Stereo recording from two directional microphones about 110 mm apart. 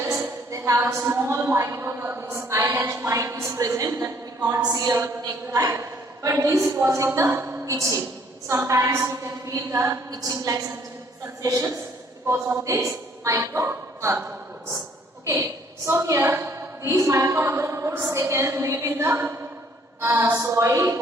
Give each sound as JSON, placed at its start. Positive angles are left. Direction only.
{"t": 0.0, "sound": "a woman's voice", "side_deg": -25}
{"t": 15.9, "sound": "a woman's voice", "side_deg": -25}